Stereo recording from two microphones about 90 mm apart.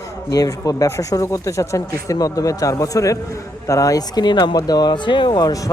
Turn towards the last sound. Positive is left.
turn(degrees=50)  # may be behind; listen again after turning